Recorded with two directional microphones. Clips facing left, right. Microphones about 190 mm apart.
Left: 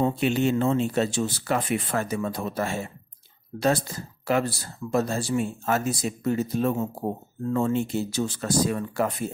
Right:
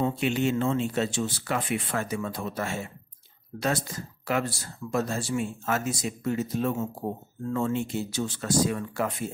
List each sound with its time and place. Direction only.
0.0 s speech: 35° left (ahead or behind)